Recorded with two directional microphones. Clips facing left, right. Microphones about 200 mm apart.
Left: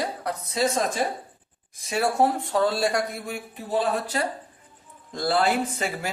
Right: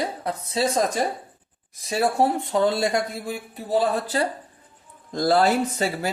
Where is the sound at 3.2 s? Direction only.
35° right (ahead or behind).